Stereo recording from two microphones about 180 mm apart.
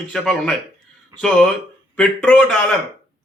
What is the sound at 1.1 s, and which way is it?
Speech, 20° right (ahead or behind).